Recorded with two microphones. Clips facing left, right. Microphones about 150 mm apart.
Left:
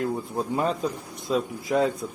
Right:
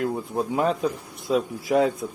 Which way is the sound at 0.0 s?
5° right (ahead or behind).